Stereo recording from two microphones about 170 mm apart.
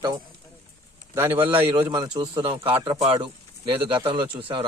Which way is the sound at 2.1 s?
35° right (ahead or behind).